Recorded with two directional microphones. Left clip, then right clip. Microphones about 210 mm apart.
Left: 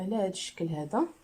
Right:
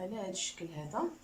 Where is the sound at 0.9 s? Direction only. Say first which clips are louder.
Left 6 dB; 55° left (ahead or behind).